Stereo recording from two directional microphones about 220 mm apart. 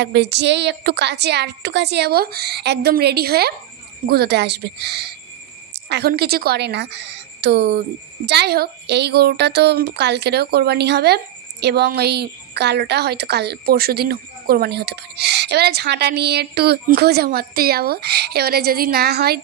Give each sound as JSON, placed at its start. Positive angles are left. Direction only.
{"t": 0.0, "sound": "a woman's voice", "side_deg": -50}